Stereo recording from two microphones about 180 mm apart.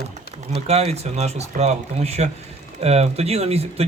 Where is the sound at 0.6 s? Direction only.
35° right (ahead or behind).